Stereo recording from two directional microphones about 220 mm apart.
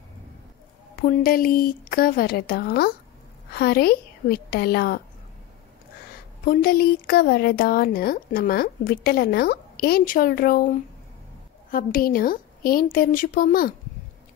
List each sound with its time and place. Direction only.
1.0 s a woman's voice: 40° left (ahead or behind)
6.4 s a woman's voice: 40° left (ahead or behind)